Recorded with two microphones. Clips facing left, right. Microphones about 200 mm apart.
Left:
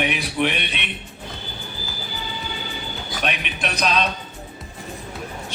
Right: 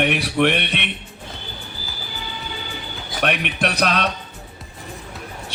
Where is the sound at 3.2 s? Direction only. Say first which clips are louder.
Right 6 dB; 60° right (ahead or behind).